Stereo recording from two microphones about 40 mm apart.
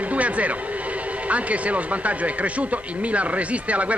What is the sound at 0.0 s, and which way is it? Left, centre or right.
Speech, right.